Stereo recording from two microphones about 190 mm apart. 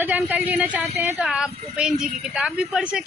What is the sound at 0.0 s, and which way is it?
A woman's voice, 10° right (ahead or behind).